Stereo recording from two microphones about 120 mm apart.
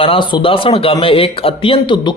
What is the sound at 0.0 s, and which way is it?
Speech, 45° left (ahead or behind).